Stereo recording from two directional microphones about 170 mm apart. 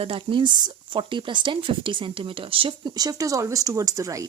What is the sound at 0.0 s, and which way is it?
Speech, 30° right (ahead or behind).